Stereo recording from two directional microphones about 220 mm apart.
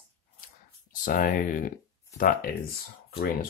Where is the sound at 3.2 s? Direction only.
40° left (ahead or behind).